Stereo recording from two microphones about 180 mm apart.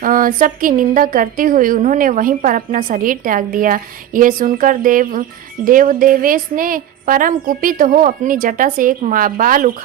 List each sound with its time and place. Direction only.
0.0 s a woman's voice: 50° right (ahead or behind)